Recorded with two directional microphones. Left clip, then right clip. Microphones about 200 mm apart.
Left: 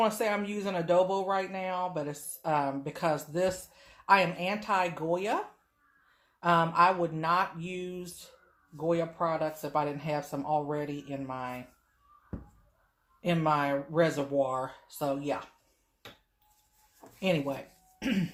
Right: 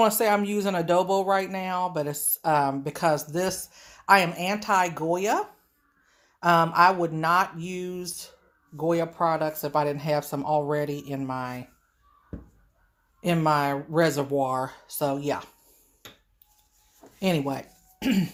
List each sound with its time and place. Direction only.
0.0 s speech: 45° right (ahead or behind)
13.2 s speech: 45° right (ahead or behind)
17.2 s speech: 50° right (ahead or behind)